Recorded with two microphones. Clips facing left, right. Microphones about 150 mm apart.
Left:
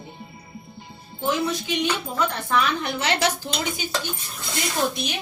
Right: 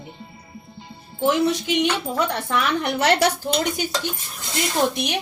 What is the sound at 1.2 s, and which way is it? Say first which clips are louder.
A woman's voice: right 5 dB; 70° right (ahead or behind).